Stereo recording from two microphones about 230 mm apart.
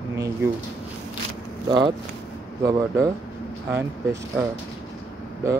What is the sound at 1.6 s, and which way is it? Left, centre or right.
Speech, centre.